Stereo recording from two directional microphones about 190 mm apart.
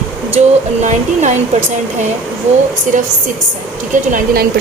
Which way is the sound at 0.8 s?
40° right (ahead or behind).